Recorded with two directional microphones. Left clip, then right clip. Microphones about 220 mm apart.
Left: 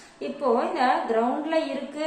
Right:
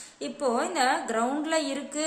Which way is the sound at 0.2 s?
35° right (ahead or behind).